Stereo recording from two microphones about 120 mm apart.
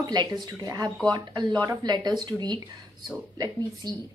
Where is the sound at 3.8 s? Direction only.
35° right (ahead or behind).